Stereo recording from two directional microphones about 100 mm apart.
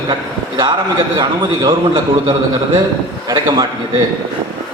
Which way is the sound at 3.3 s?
40° right (ahead or behind).